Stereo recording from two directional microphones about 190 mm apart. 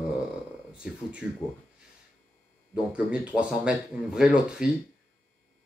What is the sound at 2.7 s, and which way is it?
Speech, 5° right (ahead or behind).